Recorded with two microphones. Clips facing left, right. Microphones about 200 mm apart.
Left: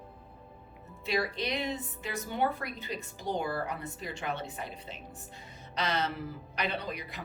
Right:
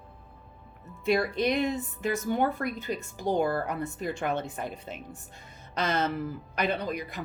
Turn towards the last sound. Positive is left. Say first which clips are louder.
# right 5 dB
turn(degrees=-45)  # may be behind; listen again after turning